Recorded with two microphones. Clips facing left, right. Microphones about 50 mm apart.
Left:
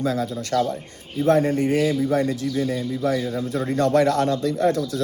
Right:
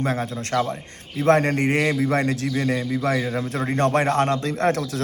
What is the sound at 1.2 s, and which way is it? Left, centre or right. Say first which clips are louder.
A man's voice: even; right.